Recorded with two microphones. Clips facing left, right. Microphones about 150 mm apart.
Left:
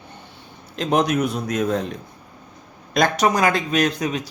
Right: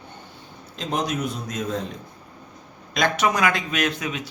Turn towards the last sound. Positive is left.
turn(degrees=40)  # may be behind; listen again after turning